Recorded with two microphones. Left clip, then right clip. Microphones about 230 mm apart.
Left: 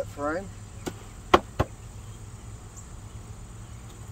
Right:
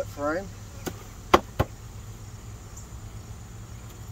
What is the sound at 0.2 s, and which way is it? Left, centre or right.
Chop, centre.